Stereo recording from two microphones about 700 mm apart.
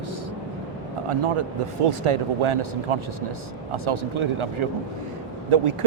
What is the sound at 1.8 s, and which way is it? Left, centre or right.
Speech, right.